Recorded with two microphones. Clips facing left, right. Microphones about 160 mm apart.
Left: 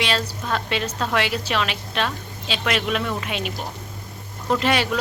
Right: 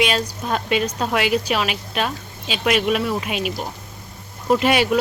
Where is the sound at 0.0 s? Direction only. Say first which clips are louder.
Right 4 dB; 15° right (ahead or behind).